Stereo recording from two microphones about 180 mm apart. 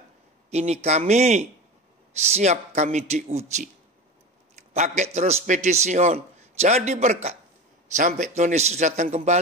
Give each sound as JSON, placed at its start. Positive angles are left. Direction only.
{"t": 0.5, "sound": "a man's voice", "side_deg": -35}